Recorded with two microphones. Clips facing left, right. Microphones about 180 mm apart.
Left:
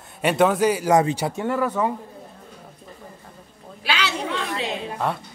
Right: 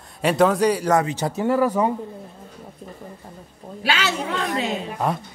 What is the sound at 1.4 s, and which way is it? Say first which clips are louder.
Speech: right 5 dB; 10° right (ahead or behind).